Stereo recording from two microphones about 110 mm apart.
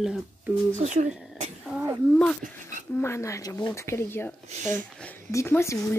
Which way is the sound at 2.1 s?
5° left (ahead or behind).